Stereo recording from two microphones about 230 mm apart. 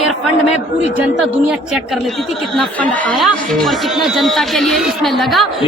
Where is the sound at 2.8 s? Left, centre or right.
Centre.